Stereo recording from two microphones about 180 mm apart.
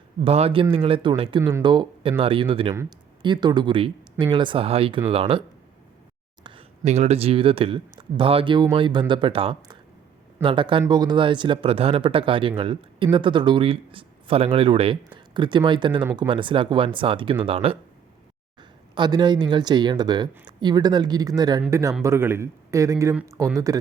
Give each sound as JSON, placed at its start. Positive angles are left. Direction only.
{"t": 0.3, "sound": "speech", "side_deg": -35}
{"t": 6.4, "sound": "speech", "side_deg": -30}
{"t": 18.9, "sound": "speech", "side_deg": -25}